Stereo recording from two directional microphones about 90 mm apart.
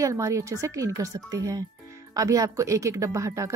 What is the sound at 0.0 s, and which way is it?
Speech, 35° right (ahead or behind).